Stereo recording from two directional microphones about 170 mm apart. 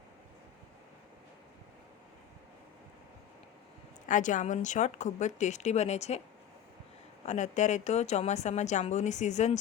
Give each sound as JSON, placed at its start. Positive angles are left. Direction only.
{"t": 4.1, "sound": "a woman's voice", "side_deg": 50}
{"t": 7.3, "sound": "a woman's voice", "side_deg": 45}